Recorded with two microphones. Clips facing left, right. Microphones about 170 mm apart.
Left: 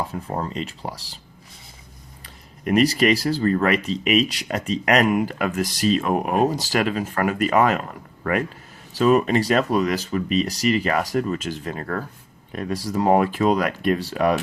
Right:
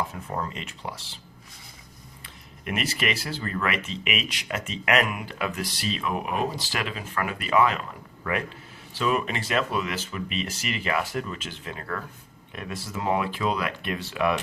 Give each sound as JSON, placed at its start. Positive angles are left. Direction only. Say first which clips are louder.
{"t": 0.0, "sound": "speech", "louder": "left 4 dB", "side_deg": 35}
{"t": 2.2, "sound": "speech", "louder": "left 9 dB", "side_deg": 35}